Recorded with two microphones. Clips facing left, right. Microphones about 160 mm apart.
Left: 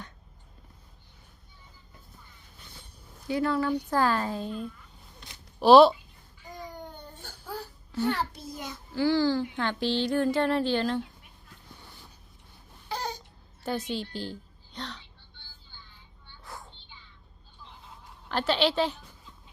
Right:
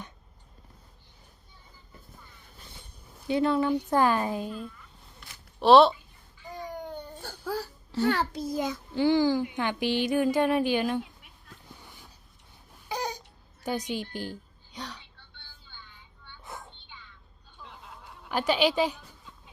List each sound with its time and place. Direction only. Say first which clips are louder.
3.2 s speech: right 2 dB; 20° right (ahead or behind)
5.5 s speech: left 1 dB; centre (ahead or behind)
7.2 s babbling: right 5 dB; 90° right
9.0 s speech: right 1 dB; 20° right (ahead or behind)
12.9 s a sound: right 1 dB; 15° right (ahead or behind)
13.7 s a woman's voice: even; 15° right (ahead or behind)
15.7 s child singing: right 3 dB; 60° right (ahead or behind)
16.4 s a sound: right 1 dB; 20° right (ahead or behind)
17.6 s snicker: right 3 dB; 70° right (ahead or behind)
18.3 s speech: right 1 dB; 10° right (ahead or behind)